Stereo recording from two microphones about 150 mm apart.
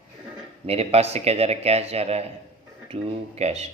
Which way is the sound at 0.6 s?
40° right (ahead or behind).